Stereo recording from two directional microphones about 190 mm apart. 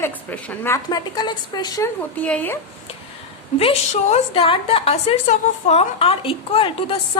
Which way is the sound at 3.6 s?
35° left (ahead or behind).